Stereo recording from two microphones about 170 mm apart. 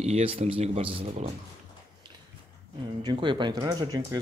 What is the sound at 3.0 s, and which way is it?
Speech, 30° right (ahead or behind).